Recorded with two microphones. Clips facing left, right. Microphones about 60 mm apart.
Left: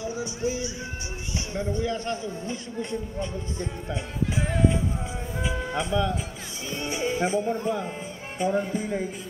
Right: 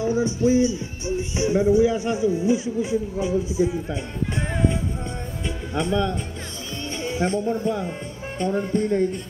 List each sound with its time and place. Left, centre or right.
0.0 s music: right
1.0 s speech: right; by 6.2 s centre
6.7 s music: centre
7.1 s speech: centre